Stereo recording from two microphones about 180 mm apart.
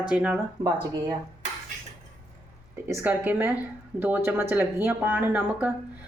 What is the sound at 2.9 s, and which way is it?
Speech, 10° right (ahead or behind).